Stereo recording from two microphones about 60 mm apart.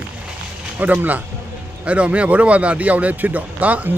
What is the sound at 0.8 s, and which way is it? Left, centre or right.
A man's voice, right.